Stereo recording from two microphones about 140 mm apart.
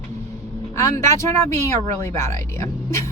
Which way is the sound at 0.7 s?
20° left (ahead or behind).